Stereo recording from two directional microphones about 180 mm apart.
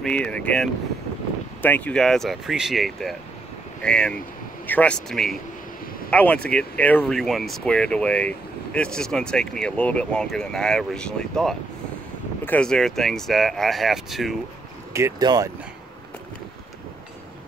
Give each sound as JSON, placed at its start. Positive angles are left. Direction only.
{"t": 0.0, "sound": "speech", "side_deg": 5}
{"t": 14.9, "sound": "speech", "side_deg": -15}